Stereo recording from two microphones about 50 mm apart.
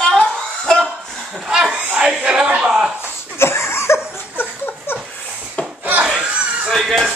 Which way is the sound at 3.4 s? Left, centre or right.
Left.